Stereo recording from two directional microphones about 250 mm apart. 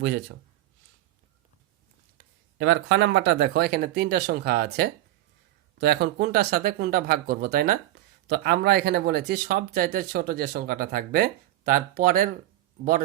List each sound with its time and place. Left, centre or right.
0.0 s speech: right
2.6 s speech: right